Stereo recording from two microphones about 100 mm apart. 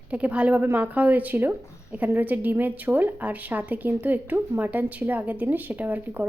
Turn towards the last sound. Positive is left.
turn(degrees=-15)  # may be behind; listen again after turning